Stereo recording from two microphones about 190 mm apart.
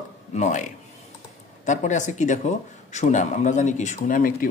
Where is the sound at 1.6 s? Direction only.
40° left (ahead or behind).